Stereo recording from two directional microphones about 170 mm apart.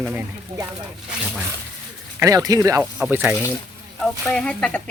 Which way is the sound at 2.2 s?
20° right (ahead or behind).